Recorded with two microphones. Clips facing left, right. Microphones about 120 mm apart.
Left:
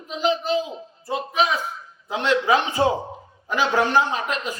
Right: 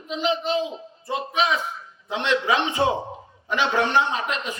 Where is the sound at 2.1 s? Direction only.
40° left (ahead or behind).